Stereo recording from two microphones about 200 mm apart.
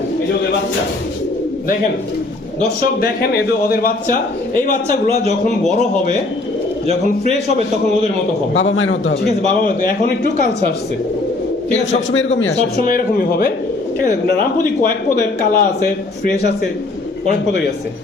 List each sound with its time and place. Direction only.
3.0 s a man's voice: 50° left (ahead or behind)
8.5 s a man's voice: 75° left (ahead or behind)
9.5 s a man's voice: 40° left (ahead or behind)
11.9 s a man's voice: 70° left (ahead or behind)
12.7 s a man's voice: 45° left (ahead or behind)